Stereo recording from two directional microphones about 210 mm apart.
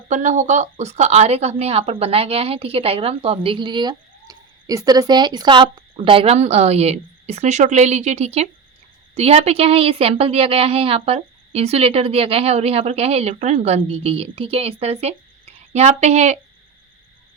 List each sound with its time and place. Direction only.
0.1 s a woman's voice: 35° right (ahead or behind)